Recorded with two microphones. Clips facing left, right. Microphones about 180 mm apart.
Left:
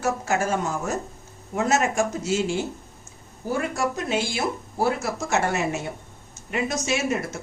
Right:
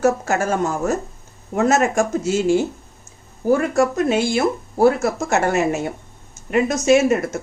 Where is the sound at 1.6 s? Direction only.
45° right (ahead or behind).